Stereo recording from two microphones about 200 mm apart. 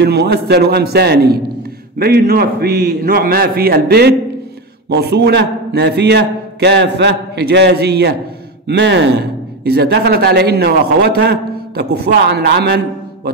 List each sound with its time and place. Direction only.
0.0 s a man's voice: 55° right (ahead or behind)